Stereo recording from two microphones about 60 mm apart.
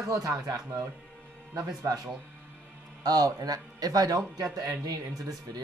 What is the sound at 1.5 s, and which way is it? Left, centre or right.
Speech, right.